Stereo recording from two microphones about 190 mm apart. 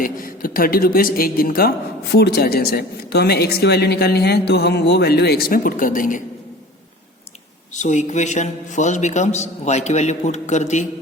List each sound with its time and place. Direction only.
0.0 s a woman's voice: 50° left (ahead or behind)
7.7 s a man's voice: 40° left (ahead or behind)